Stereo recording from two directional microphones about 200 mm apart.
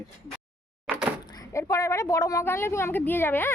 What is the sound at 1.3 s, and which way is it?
A woman's voice, 15° left (ahead or behind).